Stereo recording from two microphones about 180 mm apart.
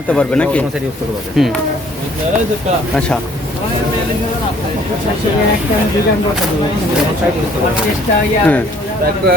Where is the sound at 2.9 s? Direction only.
5° left (ahead or behind).